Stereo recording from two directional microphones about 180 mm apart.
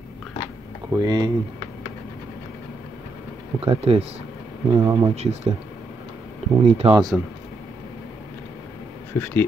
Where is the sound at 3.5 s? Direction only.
35° right (ahead or behind).